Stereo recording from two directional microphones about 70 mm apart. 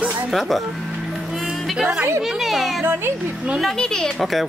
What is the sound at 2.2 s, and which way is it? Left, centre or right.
Speech, centre.